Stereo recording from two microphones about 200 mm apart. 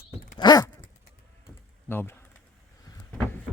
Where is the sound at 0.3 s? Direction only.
20° left (ahead or behind).